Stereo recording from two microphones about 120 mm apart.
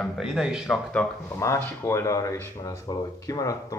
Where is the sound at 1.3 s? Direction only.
25° left (ahead or behind).